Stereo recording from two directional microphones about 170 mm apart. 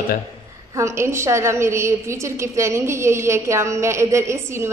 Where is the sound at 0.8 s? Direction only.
15° right (ahead or behind).